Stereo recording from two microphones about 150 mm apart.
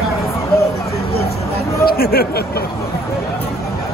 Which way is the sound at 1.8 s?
90° left.